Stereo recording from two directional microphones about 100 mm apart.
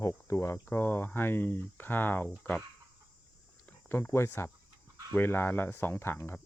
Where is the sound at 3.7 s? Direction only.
20° left (ahead or behind).